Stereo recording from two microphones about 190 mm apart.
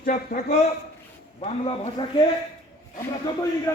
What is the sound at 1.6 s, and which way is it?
Speech, 25° left (ahead or behind).